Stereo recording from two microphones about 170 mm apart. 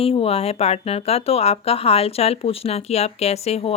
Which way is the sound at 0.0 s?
35° left (ahead or behind).